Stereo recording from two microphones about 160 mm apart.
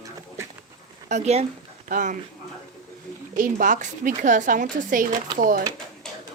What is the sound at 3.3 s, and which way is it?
Speech, 55° right (ahead or behind).